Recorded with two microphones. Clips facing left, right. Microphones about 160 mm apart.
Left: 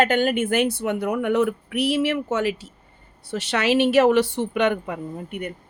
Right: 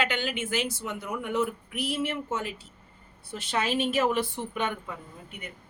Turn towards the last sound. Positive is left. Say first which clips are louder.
# left 13 dB
turn(degrees=65)  # may be behind; listen again after turning